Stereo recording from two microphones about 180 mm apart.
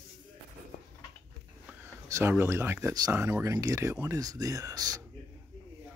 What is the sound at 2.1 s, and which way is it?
Speech, 15° right (ahead or behind).